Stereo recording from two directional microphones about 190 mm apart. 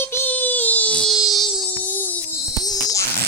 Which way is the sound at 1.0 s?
Centre (ahead or behind).